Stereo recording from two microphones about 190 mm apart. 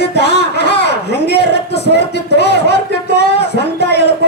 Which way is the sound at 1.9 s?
60° left (ahead or behind).